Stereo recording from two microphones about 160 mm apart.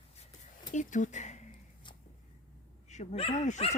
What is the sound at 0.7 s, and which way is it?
Speech, 50° left (ahead or behind).